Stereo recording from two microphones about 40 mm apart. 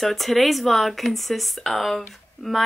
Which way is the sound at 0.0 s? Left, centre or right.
Centre.